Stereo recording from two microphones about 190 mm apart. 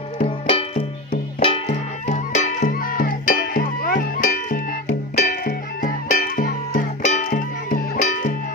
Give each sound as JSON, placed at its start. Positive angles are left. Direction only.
{"t": 0.3, "sound": "music", "side_deg": 30}
{"t": 2.0, "sound": "music", "side_deg": 40}